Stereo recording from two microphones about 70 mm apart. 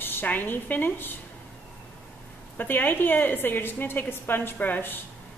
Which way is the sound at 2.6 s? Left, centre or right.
Left.